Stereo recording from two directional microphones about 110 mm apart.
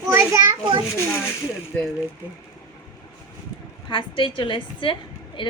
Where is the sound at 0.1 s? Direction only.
25° right (ahead or behind).